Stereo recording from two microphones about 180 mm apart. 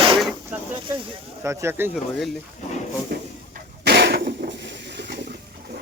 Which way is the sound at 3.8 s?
65° right (ahead or behind).